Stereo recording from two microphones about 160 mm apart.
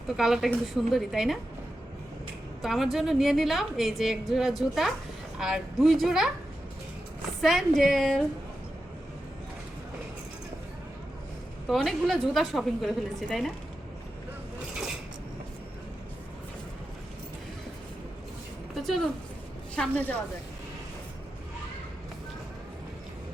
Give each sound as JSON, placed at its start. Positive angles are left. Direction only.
{"t": 0.1, "sound": "a woman's voice", "side_deg": 0}
{"t": 2.6, "sound": "a woman's voice", "side_deg": 0}
{"t": 7.4, "sound": "a woman's voice", "side_deg": 0}
{"t": 11.7, "sound": "a woman's voice", "side_deg": 0}
{"t": 18.7, "sound": "a sound", "side_deg": 0}
{"t": 19.7, "sound": "a woman's voice", "side_deg": 10}